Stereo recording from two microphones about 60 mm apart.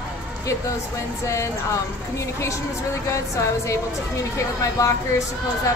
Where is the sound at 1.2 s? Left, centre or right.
Left.